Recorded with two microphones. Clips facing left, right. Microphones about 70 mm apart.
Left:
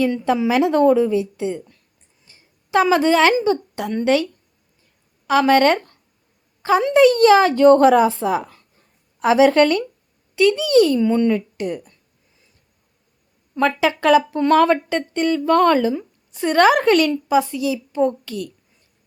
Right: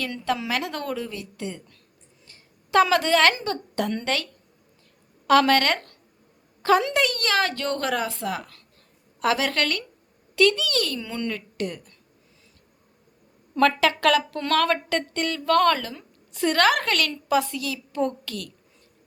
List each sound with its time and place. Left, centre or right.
0.0 s a woman's voice: centre
13.6 s a woman's voice: centre